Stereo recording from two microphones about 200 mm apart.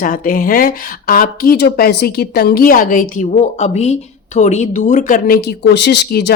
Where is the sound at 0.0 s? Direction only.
45° left (ahead or behind).